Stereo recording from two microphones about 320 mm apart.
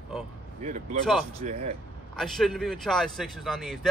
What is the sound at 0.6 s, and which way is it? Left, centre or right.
Speech, right.